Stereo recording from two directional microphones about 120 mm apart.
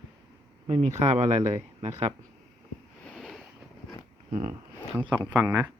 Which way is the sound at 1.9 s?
65° right (ahead or behind).